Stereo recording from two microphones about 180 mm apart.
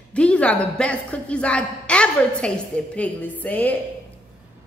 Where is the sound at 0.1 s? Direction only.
5° left (ahead or behind).